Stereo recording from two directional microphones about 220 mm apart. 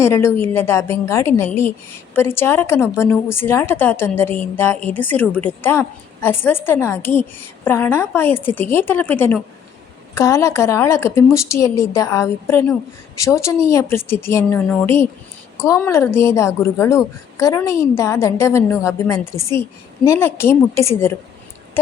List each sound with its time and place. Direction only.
0.0 s a woman's voice: 10° left (ahead or behind)